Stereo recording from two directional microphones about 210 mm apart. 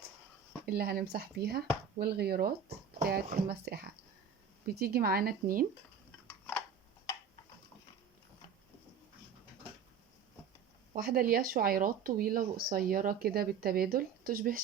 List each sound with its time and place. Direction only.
0.6 s speech: 45° right (ahead or behind)
10.9 s speech: 45° right (ahead or behind)